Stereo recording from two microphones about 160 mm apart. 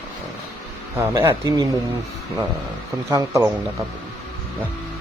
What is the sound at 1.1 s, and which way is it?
Speech, 20° right (ahead or behind).